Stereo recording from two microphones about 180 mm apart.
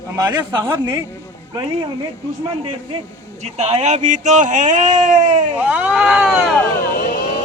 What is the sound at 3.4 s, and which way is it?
Speech, 35° right (ahead or behind).